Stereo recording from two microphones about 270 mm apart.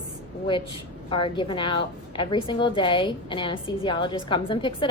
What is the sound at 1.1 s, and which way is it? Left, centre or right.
A woman's voice, centre.